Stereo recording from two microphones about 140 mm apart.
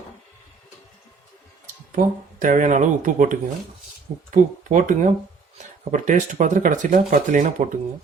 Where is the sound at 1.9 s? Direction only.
70° right (ahead or behind).